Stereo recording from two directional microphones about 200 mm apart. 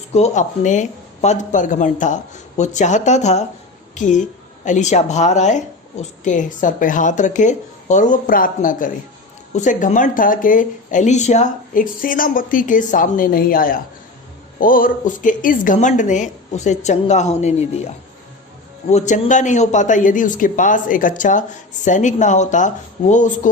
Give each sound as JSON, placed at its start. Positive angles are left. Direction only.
{"t": 0.1, "sound": "a woman's voice", "side_deg": 35}
{"t": 18.9, "sound": "a woman's voice", "side_deg": 35}